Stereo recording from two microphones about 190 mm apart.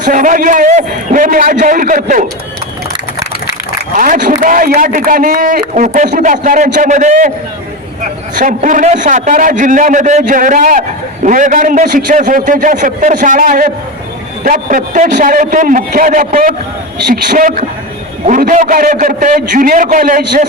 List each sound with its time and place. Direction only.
0.0 s a man's voice: 45° right (ahead or behind)
3.9 s a man's voice: 45° right (ahead or behind)
8.4 s a man's voice: 45° right (ahead or behind)